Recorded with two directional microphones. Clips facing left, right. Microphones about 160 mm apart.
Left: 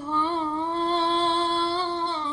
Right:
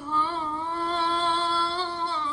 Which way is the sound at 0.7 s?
25° left (ahead or behind).